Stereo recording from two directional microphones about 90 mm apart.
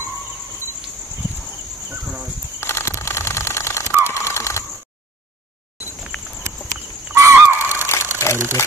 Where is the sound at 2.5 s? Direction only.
30° left (ahead or behind).